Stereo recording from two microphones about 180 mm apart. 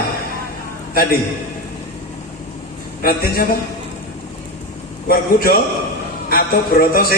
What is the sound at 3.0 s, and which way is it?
Speech, 55° left (ahead or behind).